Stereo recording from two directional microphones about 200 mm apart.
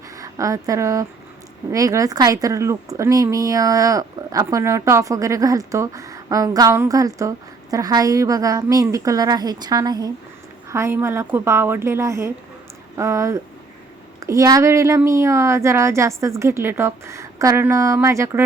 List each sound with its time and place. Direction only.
0.2 s speech: 15° right (ahead or behind)